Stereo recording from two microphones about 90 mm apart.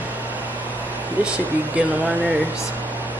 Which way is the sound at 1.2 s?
15° right (ahead or behind).